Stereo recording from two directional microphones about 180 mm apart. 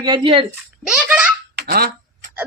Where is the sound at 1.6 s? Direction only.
60° right (ahead or behind).